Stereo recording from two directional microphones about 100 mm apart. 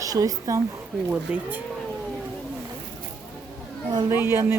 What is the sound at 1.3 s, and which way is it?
Speech, 10° right (ahead or behind).